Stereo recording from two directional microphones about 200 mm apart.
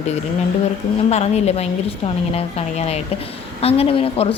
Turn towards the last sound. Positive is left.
turn(degrees=30)  # may be behind; listen again after turning